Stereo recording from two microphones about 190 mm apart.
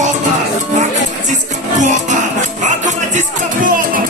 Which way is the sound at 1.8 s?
40° right (ahead or behind).